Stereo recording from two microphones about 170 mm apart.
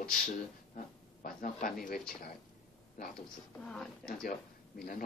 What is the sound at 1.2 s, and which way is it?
Speech, 55° left (ahead or behind).